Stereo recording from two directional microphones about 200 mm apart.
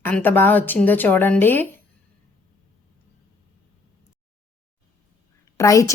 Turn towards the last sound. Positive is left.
turn(degrees=15)  # may be behind; listen again after turning